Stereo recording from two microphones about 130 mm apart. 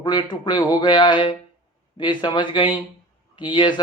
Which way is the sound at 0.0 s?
35° left (ahead or behind).